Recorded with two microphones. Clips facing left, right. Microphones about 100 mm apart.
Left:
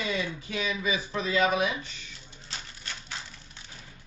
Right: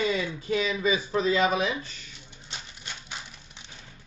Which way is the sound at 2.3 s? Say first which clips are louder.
Even; 20° right (ahead or behind).